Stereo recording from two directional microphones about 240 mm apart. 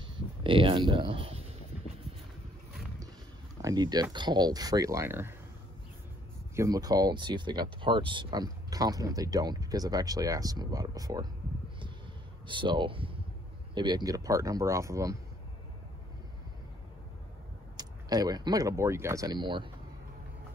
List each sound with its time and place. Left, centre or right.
0.0 s a sound: right
3.6 s speech: centre
6.5 s speech: centre
12.4 s speech: centre
17.7 s speech: centre